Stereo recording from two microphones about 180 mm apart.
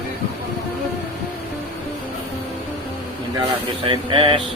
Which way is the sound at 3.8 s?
30° right (ahead or behind).